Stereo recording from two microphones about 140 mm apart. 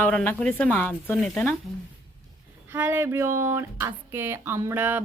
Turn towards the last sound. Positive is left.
turn(degrees=-15)  # may be behind; listen again after turning